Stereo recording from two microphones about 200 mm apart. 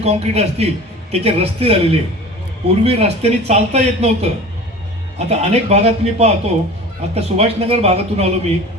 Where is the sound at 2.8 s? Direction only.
30° right (ahead or behind).